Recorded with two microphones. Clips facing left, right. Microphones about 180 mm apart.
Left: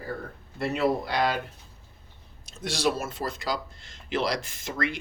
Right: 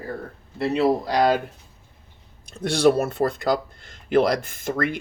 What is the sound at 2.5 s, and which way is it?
Speech, 60° right (ahead or behind).